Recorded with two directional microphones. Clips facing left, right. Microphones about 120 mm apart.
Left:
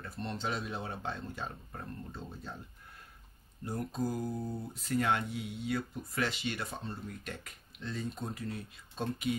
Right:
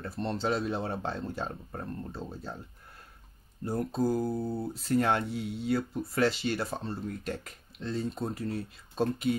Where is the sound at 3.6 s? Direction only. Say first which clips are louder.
Right 6 dB; 35° right (ahead or behind).